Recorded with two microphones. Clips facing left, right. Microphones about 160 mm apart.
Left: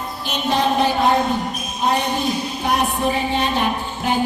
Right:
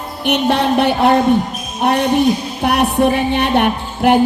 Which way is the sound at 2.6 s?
65° right (ahead or behind).